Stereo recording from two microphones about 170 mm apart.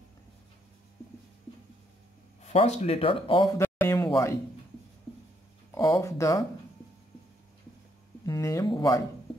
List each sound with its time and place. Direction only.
2.4 s speech: 40° left (ahead or behind)
3.5 s a sound: 10° left (ahead or behind)
3.9 s speech: 20° left (ahead or behind)
5.8 s speech: 20° left (ahead or behind)
8.3 s speech: 20° left (ahead or behind)